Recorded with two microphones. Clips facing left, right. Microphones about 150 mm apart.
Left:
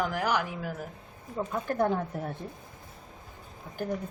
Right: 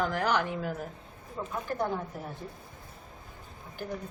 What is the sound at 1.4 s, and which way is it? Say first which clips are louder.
Speech: left 4 dB; 55° left (ahead or behind).